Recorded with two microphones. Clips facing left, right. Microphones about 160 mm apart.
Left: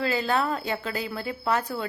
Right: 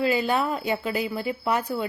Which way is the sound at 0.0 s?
10° right (ahead or behind).